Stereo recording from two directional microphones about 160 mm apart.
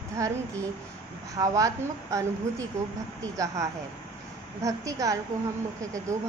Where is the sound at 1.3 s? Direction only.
20° right (ahead or behind).